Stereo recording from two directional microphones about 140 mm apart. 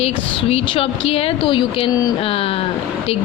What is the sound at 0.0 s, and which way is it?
A woman's voice, 45° left (ahead or behind).